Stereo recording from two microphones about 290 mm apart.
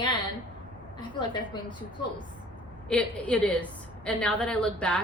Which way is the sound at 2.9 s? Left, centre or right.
Centre.